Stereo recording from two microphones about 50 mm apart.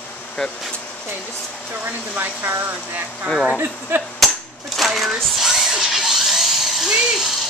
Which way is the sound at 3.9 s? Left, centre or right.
Right.